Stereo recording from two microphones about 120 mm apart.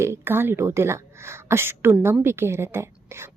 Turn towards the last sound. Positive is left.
turn(degrees=-20)  # may be behind; listen again after turning